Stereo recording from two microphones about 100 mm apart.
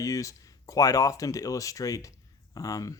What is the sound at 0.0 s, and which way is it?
Speech, 35° left (ahead or behind).